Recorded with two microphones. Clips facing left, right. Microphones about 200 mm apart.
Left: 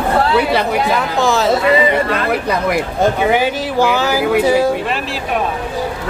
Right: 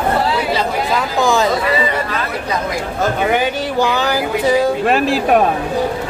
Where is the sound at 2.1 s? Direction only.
60° left (ahead or behind).